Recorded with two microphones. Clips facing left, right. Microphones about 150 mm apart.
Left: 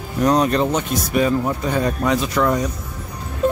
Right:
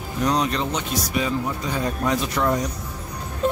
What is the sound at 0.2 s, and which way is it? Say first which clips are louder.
Speech: left 6 dB; 50° left (ahead or behind).